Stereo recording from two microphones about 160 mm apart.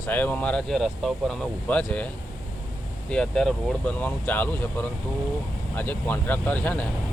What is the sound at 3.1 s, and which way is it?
Speech, 5° left (ahead or behind).